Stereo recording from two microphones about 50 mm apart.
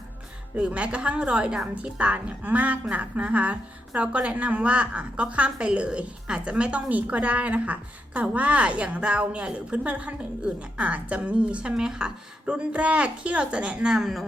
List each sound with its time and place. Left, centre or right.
0.5 s a woman's voice: right
11.7 s a woman's voice: centre
13.8 s speech: centre